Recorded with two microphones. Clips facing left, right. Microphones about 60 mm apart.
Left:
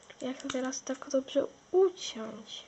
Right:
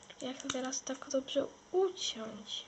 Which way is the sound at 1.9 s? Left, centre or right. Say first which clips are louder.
Left 5 dB; left.